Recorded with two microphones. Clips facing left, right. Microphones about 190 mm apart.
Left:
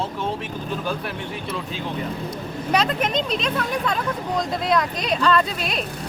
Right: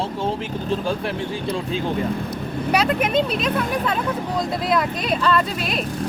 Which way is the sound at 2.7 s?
10° right (ahead or behind).